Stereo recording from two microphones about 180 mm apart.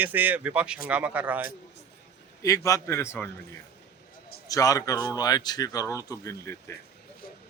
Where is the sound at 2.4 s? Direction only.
20° left (ahead or behind).